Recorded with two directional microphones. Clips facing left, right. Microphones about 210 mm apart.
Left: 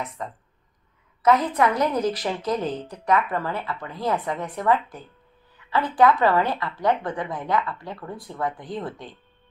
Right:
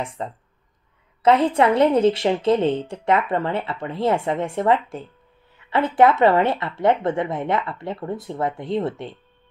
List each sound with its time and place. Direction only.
0.0 s a woman's voice: 30° right (ahead or behind)